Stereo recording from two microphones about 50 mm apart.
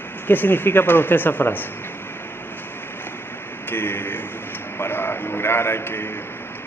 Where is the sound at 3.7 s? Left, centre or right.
Left.